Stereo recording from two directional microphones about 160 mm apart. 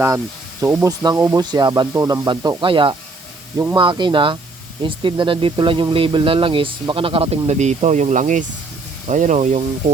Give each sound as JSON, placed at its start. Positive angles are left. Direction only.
{"t": 0.6, "sound": "speech", "side_deg": -20}